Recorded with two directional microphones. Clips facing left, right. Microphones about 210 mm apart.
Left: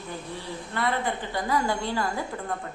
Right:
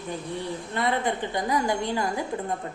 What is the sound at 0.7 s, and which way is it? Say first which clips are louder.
A woman's voice: right 1 dB; 20° right (ahead or behind).